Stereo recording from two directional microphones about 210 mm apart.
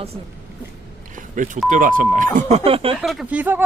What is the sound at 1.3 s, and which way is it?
Speech, 40° right (ahead or behind).